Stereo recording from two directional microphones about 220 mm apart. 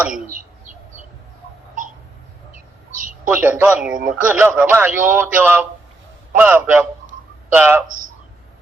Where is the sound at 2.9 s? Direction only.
35° right (ahead or behind).